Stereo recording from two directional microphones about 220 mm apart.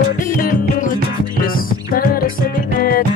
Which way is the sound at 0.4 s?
40° left (ahead or behind).